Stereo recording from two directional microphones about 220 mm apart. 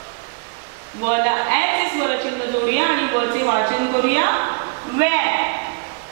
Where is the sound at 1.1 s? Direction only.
15° right (ahead or behind).